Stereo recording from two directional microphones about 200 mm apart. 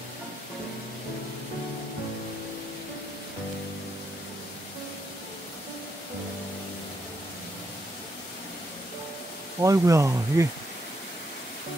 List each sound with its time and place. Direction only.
9.6 s speech: 15° right (ahead or behind)